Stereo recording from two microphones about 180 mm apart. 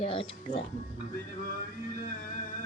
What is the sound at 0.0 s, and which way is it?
Speech, 30° left (ahead or behind).